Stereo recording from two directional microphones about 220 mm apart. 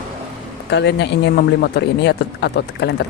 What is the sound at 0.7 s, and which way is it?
Speech, 50° left (ahead or behind).